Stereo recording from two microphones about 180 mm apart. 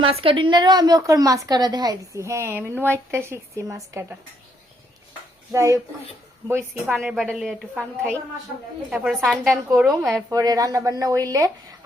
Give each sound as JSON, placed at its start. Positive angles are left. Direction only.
{"t": 0.0, "sound": "a woman's voice", "side_deg": -30}
{"t": 5.5, "sound": "speech", "side_deg": -15}
{"t": 6.9, "sound": "a woman's voice", "side_deg": 0}
{"t": 10.2, "sound": "a woman's voice", "side_deg": -20}